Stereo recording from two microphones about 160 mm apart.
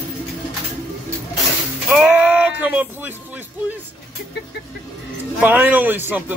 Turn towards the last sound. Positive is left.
turn(degrees=-10)  # may be behind; listen again after turning